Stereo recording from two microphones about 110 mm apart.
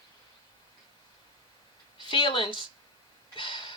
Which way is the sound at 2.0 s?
50° left (ahead or behind).